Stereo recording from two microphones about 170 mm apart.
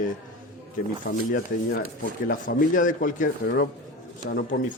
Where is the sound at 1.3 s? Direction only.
55° left (ahead or behind).